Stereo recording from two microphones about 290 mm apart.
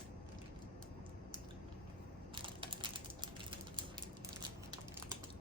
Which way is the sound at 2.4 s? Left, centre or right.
Centre.